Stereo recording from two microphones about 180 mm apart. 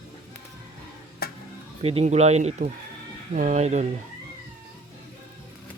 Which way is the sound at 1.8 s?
35° right (ahead or behind).